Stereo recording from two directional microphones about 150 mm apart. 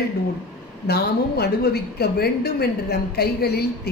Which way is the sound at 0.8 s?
90° left.